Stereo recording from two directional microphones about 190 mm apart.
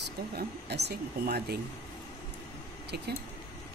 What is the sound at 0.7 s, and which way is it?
Speech, 60° right (ahead or behind).